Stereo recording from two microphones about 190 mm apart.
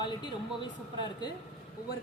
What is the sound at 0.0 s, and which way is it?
Speech, 25° left (ahead or behind).